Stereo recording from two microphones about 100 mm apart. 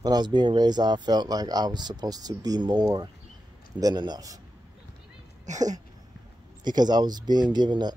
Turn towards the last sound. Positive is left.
turn(degrees=-45)  # may be behind; listen again after turning